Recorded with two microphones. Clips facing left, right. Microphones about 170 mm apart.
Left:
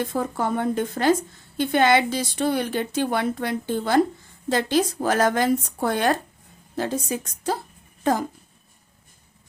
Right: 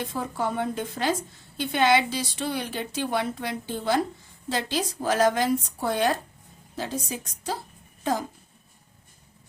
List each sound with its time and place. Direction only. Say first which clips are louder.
0.0 s a woman's voice: left 4 dB; 50° left (ahead or behind)